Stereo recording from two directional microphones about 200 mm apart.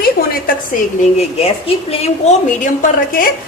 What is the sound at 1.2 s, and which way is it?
Speech, 30° left (ahead or behind).